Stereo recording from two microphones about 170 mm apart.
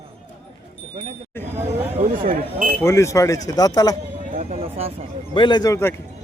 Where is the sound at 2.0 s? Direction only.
50° right (ahead or behind).